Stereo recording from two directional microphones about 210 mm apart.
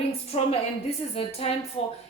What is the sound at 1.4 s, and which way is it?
Speech, 30° left (ahead or behind).